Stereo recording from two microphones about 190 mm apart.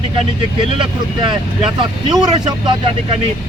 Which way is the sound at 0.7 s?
25° right (ahead or behind).